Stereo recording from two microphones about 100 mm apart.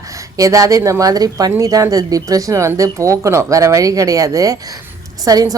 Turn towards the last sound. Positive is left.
turn(degrees=-40)  # may be behind; listen again after turning